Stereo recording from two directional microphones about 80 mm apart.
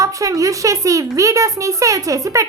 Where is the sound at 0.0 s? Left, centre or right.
Right.